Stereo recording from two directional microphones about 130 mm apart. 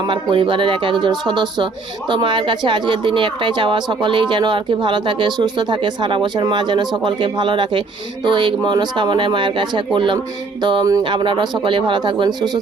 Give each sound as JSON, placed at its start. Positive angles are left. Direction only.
{"t": 0.1, "sound": "speech", "side_deg": -40}